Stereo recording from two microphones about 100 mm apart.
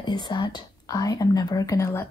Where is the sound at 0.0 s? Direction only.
45° left (ahead or behind).